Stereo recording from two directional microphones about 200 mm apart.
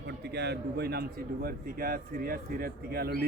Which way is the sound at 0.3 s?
55° right (ahead or behind).